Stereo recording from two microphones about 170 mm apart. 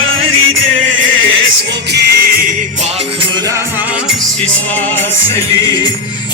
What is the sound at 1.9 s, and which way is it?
Music, 75° right (ahead or behind).